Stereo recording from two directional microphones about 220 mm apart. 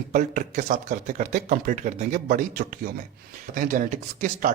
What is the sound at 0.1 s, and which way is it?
Speech, 35° right (ahead or behind).